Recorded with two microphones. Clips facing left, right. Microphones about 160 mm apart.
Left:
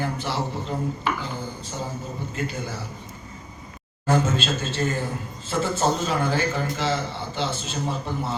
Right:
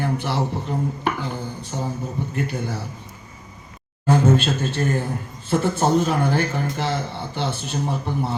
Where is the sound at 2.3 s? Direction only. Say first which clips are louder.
Right 2 dB; 65° right (ahead or behind).